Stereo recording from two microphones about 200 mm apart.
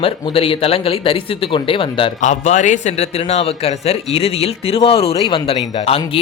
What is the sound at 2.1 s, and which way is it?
A man's voice, 35° left (ahead or behind).